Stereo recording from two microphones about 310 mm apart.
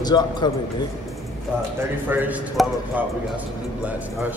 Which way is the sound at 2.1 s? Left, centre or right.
Centre.